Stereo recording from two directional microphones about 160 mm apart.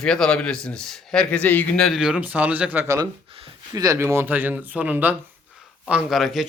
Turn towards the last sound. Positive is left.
turn(degrees=0)  # may be behind; listen again after turning